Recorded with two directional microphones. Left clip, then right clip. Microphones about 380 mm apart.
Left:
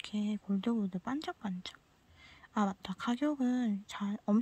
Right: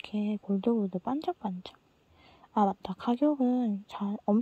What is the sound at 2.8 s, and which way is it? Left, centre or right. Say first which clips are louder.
Speech: right 6 dB; centre.